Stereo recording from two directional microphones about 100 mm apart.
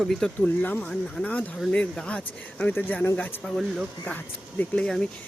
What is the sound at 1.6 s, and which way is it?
Speech, 5° left (ahead or behind).